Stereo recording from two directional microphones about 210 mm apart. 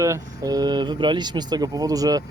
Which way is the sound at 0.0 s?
15° right (ahead or behind).